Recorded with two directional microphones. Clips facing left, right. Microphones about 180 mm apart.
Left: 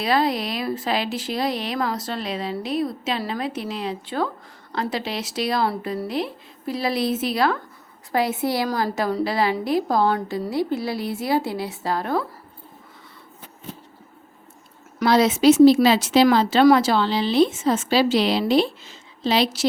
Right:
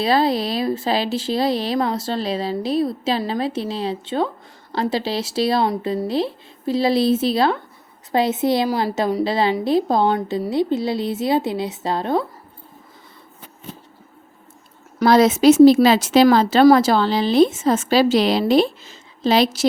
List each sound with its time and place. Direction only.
0.0 s speech: 30° right (ahead or behind)
15.0 s speech: 45° right (ahead or behind)